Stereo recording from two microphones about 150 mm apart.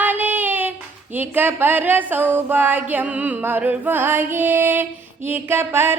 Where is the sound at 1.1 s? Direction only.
10° right (ahead or behind).